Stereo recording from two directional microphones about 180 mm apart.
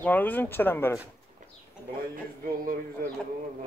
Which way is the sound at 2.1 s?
50° right (ahead or behind).